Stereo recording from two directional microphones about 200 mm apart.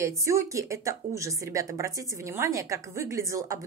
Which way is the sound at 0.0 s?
15° right (ahead or behind).